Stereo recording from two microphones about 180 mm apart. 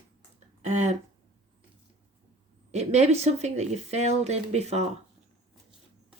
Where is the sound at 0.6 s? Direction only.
40° right (ahead or behind).